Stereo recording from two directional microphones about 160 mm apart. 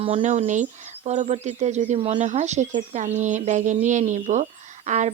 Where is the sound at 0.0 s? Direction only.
45° right (ahead or behind).